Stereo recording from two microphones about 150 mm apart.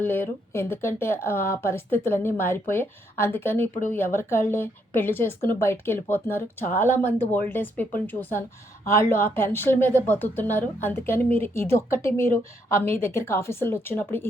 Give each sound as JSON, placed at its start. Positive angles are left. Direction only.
{"t": 0.0, "sound": "speech", "side_deg": 15}